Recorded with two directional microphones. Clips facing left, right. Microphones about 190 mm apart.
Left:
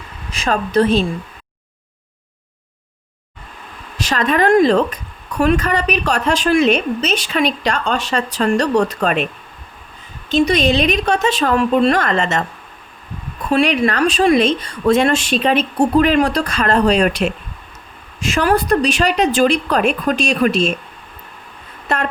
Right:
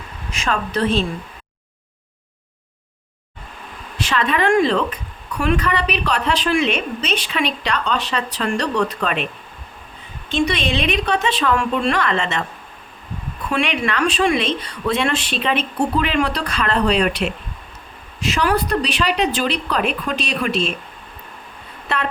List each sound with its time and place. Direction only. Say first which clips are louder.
0.3 s a woman's voice: left 3 dB; 35° left (ahead or behind)
3.9 s a woman's voice: left 3 dB; 40° left (ahead or behind)
10.2 s a woman's voice: left 6 dB; 40° left (ahead or behind)
13.5 s a woman's voice: left 6 dB; 40° left (ahead or behind)
21.9 s a sound: left 4 dB; 45° left (ahead or behind)